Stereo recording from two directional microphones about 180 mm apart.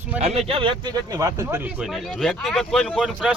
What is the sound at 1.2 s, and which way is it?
Speech, 15° right (ahead or behind).